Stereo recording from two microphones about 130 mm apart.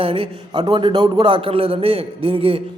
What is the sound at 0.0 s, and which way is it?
A man's voice, 45° right (ahead or behind).